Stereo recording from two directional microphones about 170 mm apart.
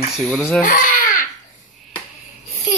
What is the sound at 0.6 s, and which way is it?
Baby cry, 50° left (ahead or behind).